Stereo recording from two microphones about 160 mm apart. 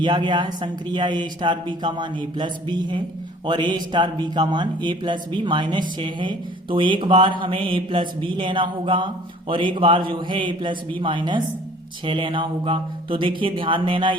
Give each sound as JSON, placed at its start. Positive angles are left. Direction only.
{"t": 0.0, "sound": "speech", "side_deg": -30}